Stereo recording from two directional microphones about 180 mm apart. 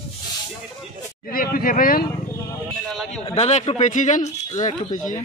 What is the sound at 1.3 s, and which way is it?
Speech, 55° left (ahead or behind).